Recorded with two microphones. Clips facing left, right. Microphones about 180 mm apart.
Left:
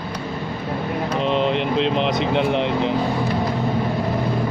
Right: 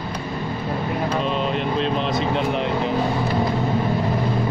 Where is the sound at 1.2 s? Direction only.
20° left (ahead or behind).